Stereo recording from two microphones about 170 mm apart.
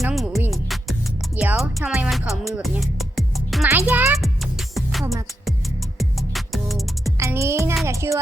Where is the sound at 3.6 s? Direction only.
10° right (ahead or behind).